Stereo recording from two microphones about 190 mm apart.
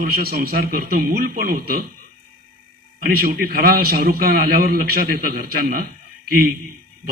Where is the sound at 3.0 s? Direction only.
50° right (ahead or behind).